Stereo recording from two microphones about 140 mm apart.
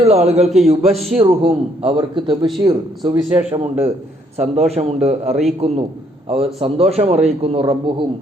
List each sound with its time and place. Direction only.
0.0 s a man's voice: 50° right (ahead or behind)
0.9 s a man's voice: centre (ahead or behind)
1.2 s a man's voice: 40° right (ahead or behind)
4.7 s a man's voice: 45° right (ahead or behind)